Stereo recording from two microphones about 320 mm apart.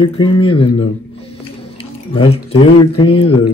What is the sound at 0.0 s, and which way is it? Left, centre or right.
Speech, centre.